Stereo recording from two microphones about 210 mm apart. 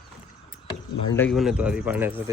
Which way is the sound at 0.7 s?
10° left (ahead or behind).